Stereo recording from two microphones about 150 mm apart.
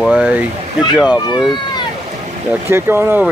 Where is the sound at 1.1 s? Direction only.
30° left (ahead or behind).